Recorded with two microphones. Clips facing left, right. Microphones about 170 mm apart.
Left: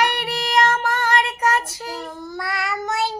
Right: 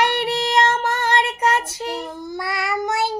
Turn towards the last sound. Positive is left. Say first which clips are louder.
# right 2 dB
turn(degrees=-10)  # may be behind; listen again after turning